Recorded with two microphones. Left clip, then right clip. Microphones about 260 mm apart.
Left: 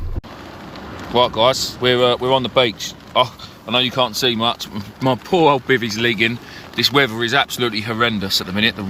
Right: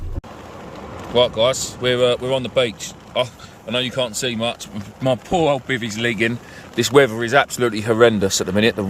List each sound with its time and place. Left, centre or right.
1.1 s speech: centre
6.7 s speech: right